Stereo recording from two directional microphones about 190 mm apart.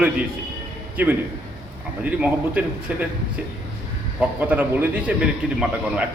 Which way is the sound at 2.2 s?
5° right (ahead or behind).